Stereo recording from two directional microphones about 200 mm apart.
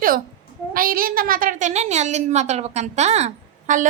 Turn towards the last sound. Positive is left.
turn(degrees=-35)  # may be behind; listen again after turning